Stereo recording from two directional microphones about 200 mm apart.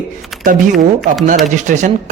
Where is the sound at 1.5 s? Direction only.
40° right (ahead or behind).